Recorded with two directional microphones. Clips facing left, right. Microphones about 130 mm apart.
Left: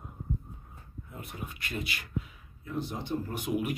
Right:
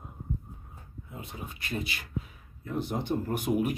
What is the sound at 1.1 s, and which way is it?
Speech, 25° right (ahead or behind).